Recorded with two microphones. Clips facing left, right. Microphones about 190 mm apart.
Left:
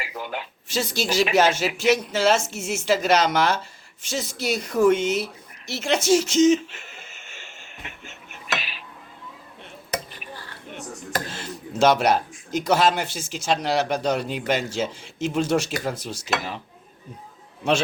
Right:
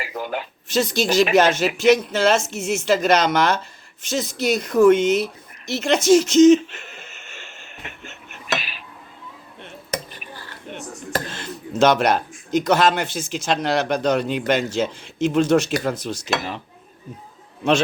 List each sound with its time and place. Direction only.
0.0 s a sound: 45° right (ahead or behind)
0.7 s a man's voice: 10° left (ahead or behind)
6.7 s a sound: 10° left (ahead or behind)
8.4 s cutlery: 50° right (ahead or behind)
11.3 s a man's voice: 10° left (ahead or behind)
17.6 s a man's voice: 10° left (ahead or behind)